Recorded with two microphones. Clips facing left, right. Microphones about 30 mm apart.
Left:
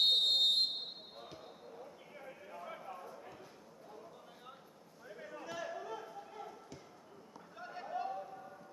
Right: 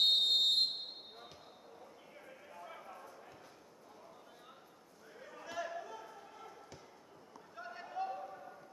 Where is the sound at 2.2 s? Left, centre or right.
Centre.